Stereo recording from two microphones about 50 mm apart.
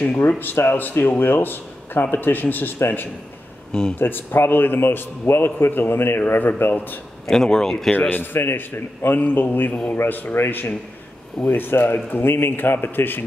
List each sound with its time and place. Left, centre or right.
0.0 s speech: left
0.4 s speech: left
7.2 s speech: centre
8.1 s speech: left
9.7 s a man's voice: left
9.9 s speech: left